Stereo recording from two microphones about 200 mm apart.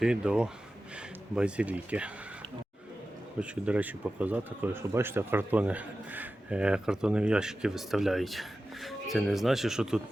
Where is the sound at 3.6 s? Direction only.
5° right (ahead or behind).